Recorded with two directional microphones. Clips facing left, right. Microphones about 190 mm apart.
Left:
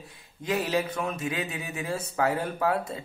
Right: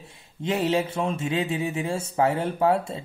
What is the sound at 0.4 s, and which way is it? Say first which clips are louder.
Speech: right 3 dB; 25° right (ahead or behind).